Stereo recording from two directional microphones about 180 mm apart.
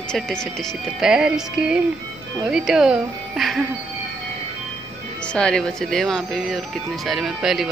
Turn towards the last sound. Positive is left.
turn(degrees=0)  # may be behind; listen again after turning